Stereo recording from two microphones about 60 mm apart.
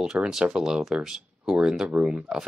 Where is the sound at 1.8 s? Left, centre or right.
Centre.